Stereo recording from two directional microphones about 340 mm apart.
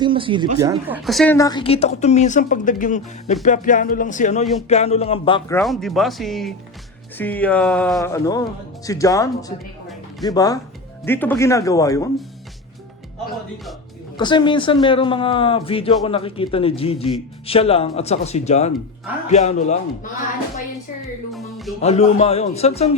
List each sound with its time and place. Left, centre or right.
0.0 s a man's voice: centre
14.2 s speech: centre
21.3 s a man's voice: centre
21.8 s speech: centre